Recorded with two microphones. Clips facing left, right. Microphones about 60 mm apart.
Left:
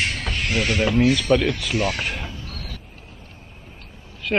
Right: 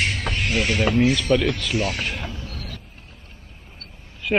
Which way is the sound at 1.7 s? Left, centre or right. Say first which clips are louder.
Left 1 dB; left.